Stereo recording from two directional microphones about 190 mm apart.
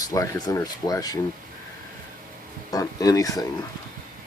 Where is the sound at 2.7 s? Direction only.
20° left (ahead or behind).